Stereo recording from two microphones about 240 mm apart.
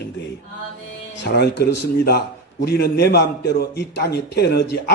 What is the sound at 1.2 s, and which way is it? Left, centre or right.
A man's voice, left.